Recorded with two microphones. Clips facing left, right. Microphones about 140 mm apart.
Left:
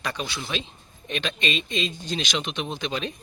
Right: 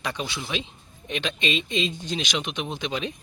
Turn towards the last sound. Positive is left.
turn(degrees=-15)  # may be behind; listen again after turning